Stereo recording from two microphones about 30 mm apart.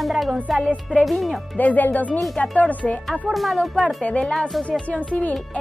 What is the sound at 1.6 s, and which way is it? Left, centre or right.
Speech, left.